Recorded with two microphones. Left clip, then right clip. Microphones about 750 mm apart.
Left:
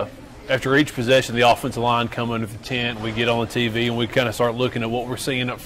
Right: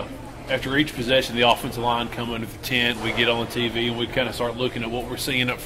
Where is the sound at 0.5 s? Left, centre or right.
Left.